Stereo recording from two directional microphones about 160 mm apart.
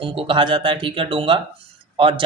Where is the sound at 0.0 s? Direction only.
35° right (ahead or behind).